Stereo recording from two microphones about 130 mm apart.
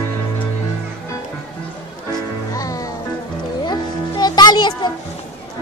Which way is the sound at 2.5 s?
25° left (ahead or behind).